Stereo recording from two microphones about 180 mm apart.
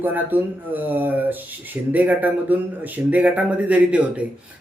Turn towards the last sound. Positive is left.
turn(degrees=-10)  # may be behind; listen again after turning